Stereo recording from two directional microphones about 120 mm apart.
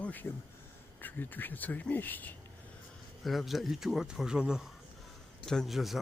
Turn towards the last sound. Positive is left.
turn(degrees=0)  # may be behind; listen again after turning